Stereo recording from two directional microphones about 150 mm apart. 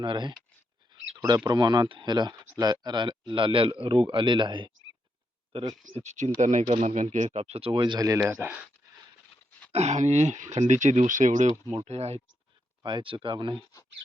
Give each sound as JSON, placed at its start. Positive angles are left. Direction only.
{"t": 0.0, "sound": "speech", "side_deg": -30}
{"t": 5.9, "sound": "speech", "side_deg": -50}
{"t": 9.7, "sound": "speech", "side_deg": -50}
{"t": 12.8, "sound": "speech", "side_deg": -30}